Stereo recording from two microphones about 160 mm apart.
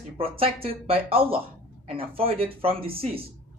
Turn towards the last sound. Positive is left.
turn(degrees=-35)  # may be behind; listen again after turning